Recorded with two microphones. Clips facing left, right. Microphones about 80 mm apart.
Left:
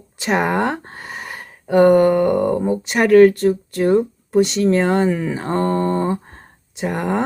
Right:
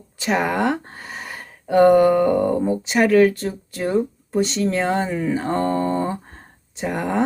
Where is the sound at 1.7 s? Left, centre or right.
Left.